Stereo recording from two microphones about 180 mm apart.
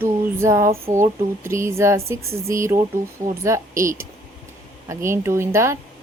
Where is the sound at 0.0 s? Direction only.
15° right (ahead or behind).